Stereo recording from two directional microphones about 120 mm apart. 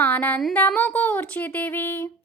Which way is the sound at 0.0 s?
15° left (ahead or behind).